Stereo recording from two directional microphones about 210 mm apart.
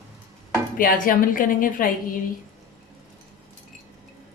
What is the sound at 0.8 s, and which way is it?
A woman's voice, 40° left (ahead or behind).